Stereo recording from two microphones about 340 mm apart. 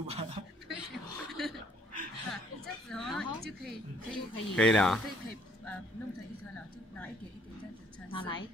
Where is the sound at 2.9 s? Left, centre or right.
Centre.